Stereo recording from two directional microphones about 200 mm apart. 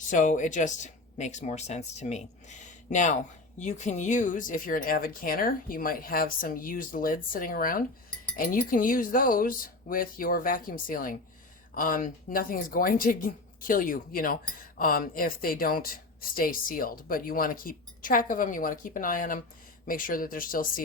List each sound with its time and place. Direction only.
0.1 s speech: 40° left (ahead or behind)